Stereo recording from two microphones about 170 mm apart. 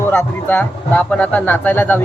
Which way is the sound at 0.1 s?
10° left (ahead or behind).